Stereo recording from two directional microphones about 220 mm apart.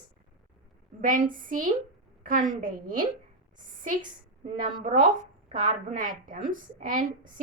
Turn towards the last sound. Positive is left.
turn(degrees=-35)  # may be behind; listen again after turning